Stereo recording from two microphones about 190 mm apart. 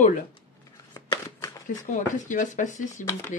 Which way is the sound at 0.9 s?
20° left (ahead or behind).